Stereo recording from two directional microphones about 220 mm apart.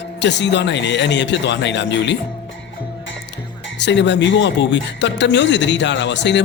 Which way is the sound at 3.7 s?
55° left (ahead or behind).